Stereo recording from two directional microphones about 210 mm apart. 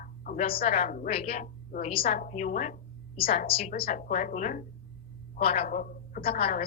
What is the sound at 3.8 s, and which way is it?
A woman's voice, 35° left (ahead or behind).